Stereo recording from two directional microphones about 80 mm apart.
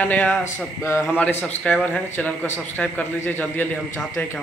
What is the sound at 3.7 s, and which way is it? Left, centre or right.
Speech, centre.